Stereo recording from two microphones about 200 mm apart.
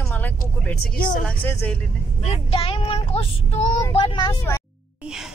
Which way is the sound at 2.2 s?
30° left (ahead or behind).